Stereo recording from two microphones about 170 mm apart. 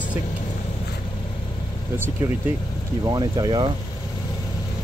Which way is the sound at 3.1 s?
25° right (ahead or behind).